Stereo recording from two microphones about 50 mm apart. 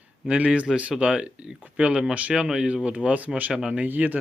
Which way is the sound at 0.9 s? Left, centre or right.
Centre.